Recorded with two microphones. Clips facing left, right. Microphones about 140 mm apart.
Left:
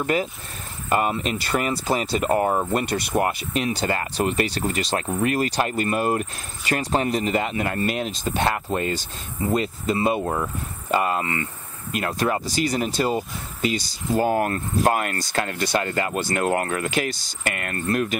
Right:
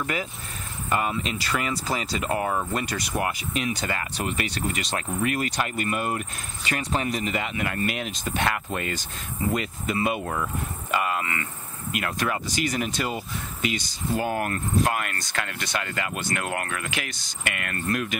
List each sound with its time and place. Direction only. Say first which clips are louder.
0.0 s speech: left 6 dB; 35° left (ahead or behind)
1.5 s speech: left 5 dB; 30° left (ahead or behind)
2.0 s speech: left 6 dB; 45° left (ahead or behind)